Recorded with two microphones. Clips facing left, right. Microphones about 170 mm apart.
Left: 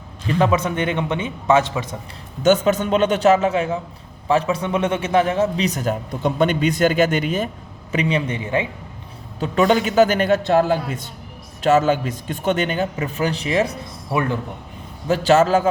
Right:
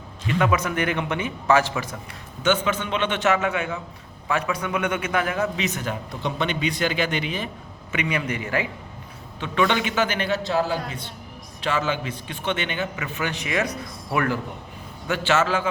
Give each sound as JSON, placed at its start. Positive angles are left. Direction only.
{"t": 0.3, "sound": "a man's voice", "side_deg": 30}
{"t": 2.4, "sound": "a man's voice", "side_deg": 40}
{"t": 7.9, "sound": "a man's voice", "side_deg": 30}
{"t": 9.4, "sound": "a man's voice", "side_deg": 40}
{"t": 15.0, "sound": "a man's voice", "side_deg": 35}